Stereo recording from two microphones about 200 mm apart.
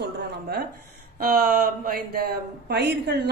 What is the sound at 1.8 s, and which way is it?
Speech, 50° right (ahead or behind).